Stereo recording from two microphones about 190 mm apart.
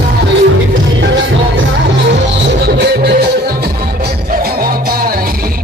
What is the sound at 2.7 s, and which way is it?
Music, 55° right (ahead or behind).